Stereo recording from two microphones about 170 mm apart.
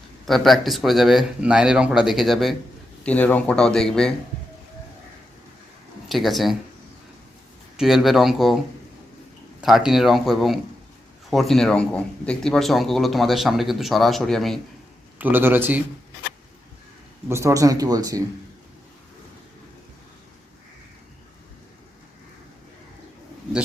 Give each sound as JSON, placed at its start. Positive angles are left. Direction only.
{"t": 0.3, "sound": "speech", "side_deg": 0}
{"t": 6.1, "sound": "speech", "side_deg": 0}
{"t": 7.8, "sound": "speech", "side_deg": 0}
{"t": 9.6, "sound": "speech", "side_deg": 0}
{"t": 15.2, "sound": "a man's voice", "side_deg": -10}
{"t": 17.2, "sound": "speech", "side_deg": -15}